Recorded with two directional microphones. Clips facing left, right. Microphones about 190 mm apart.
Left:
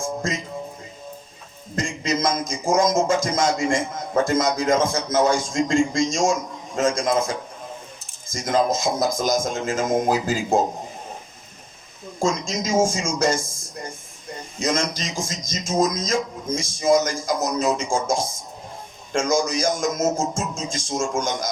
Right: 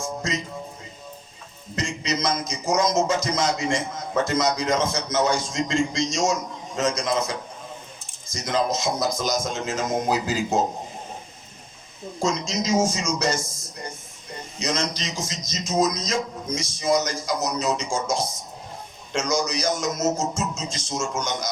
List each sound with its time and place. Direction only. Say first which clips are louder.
0.0 s music: left 2 dB; 50° left (ahead or behind)
1.7 s music: left 3 dB; 50° left (ahead or behind)
12.2 s music: left 2 dB; 50° left (ahead or behind)